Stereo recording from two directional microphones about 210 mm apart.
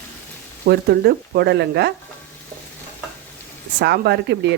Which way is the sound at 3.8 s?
50° right (ahead or behind).